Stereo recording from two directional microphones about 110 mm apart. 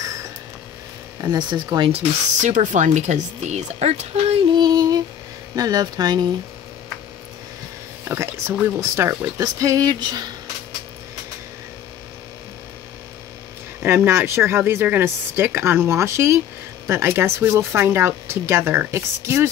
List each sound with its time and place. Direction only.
0.0 s a sound: 30° right (ahead or behind)
1.2 s speech: 40° right (ahead or behind)
2.4 s speech: 90° right; by 4.5 s 65° right (ahead or behind)
4.6 s female singing: 40° right (ahead or behind)
5.6 s speech: 35° right (ahead or behind)
8.1 s speech: 25° right (ahead or behind); by 10.2 s 40° right (ahead or behind)
13.8 s speech: 20° right (ahead or behind)